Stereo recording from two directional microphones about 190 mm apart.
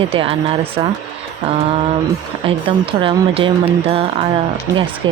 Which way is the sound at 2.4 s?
30° right (ahead or behind).